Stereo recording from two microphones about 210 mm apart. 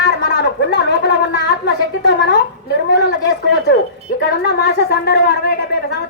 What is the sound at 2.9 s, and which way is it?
A woman's voice, 55° left (ahead or behind).